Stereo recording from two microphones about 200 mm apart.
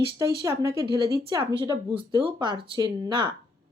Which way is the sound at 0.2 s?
15° right (ahead or behind).